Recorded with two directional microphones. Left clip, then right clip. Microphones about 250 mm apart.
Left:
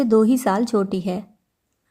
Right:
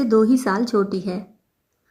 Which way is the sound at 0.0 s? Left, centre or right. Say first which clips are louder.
Even; left.